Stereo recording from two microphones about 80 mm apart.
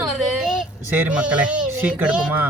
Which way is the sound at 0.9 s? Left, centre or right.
Right.